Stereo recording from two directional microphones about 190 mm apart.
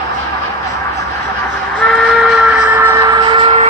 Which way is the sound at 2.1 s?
5° right (ahead or behind).